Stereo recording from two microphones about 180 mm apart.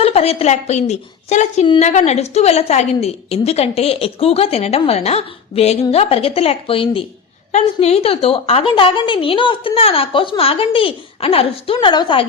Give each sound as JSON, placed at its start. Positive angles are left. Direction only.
{"t": 0.0, "sound": "a woman's voice", "side_deg": 35}